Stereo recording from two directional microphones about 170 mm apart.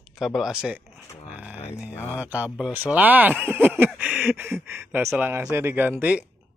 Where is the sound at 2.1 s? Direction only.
10° right (ahead or behind).